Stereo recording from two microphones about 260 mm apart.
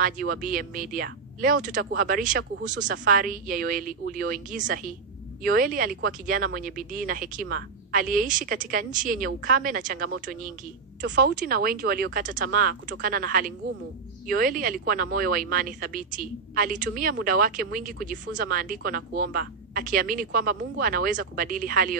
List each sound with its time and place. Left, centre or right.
0.0 s speech: right